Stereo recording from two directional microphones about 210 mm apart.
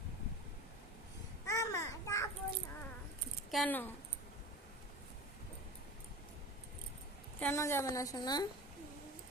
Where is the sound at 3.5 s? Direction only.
5° left (ahead or behind).